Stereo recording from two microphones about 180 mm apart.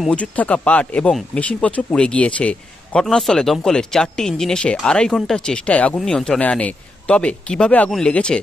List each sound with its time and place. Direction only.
0.0 s speech: 5° left (ahead or behind)